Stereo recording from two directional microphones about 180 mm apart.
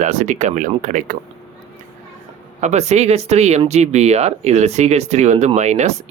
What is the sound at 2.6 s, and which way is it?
Speech, 40° right (ahead or behind).